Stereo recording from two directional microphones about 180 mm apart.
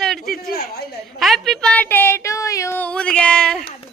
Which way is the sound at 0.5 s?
60° left (ahead or behind).